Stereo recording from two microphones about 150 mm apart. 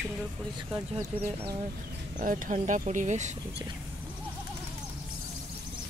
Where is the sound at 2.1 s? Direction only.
65° right (ahead or behind).